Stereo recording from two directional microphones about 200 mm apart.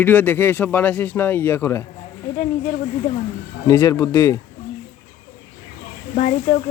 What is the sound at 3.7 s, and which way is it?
Speech, 15° left (ahead or behind).